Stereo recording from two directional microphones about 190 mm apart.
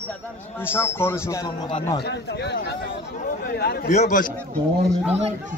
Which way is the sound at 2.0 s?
60° left (ahead or behind).